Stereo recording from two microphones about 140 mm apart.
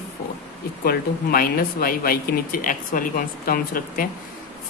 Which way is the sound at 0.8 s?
90° left.